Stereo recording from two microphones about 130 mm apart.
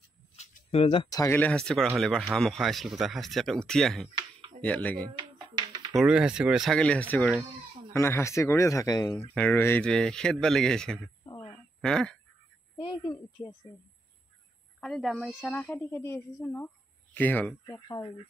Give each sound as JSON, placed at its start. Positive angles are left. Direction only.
{"t": 0.4, "sound": "a sound", "side_deg": 50}
{"t": 1.1, "sound": "speech", "side_deg": 25}
{"t": 1.4, "sound": "a woman's voice", "side_deg": 5}
{"t": 5.1, "sound": "a sound", "side_deg": -35}
{"t": 5.9, "sound": "speech", "side_deg": -5}
{"t": 6.8, "sound": "a woman's voice", "side_deg": 10}
{"t": 9.3, "sound": "a woman's voice", "side_deg": 10}
{"t": 11.3, "sound": "a sound", "side_deg": 10}
{"t": 13.0, "sound": "speech", "side_deg": 30}
{"t": 14.8, "sound": "a woman's voice", "side_deg": 0}
{"t": 15.5, "sound": "a woman's voice", "side_deg": 15}
{"t": 17.7, "sound": "speech", "side_deg": 25}